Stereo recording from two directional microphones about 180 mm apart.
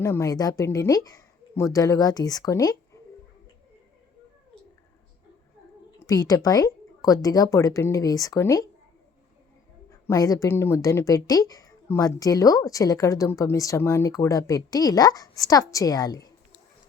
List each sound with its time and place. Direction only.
0.0 s speech: 15° left (ahead or behind)
6.1 s speech: 20° left (ahead or behind)
10.1 s speech: 20° left (ahead or behind)